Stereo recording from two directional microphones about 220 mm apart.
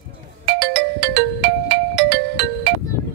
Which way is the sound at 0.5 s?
50° right (ahead or behind).